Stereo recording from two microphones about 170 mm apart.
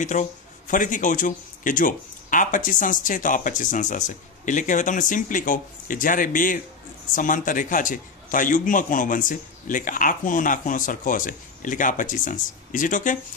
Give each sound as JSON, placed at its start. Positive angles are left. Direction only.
{"t": 0.0, "sound": "a man's voice", "side_deg": 45}